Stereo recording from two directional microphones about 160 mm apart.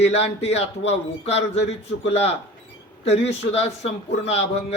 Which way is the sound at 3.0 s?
40° left (ahead or behind).